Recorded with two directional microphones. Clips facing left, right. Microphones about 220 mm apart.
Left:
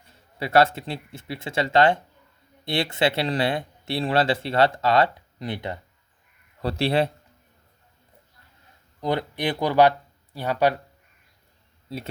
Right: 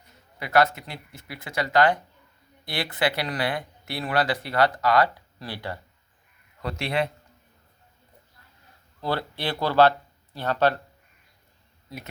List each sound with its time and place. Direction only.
0.0 s speech: 30° left (ahead or behind)
6.6 s a man's voice: 30° left (ahead or behind)
9.0 s speech: 15° left (ahead or behind)
11.9 s speech: 30° left (ahead or behind)